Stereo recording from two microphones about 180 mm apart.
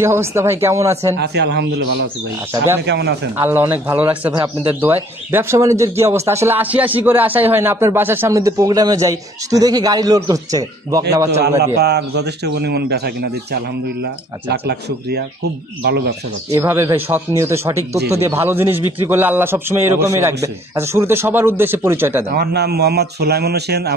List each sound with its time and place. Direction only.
0.0 s speech: 15° right (ahead or behind)
1.1 s a man's voice: 70° right (ahead or behind)
3.3 s speech: 10° right (ahead or behind)
11.4 s a man's voice: 65° right (ahead or behind)
16.6 s speech: 15° right (ahead or behind)
22.3 s speech: 65° right (ahead or behind)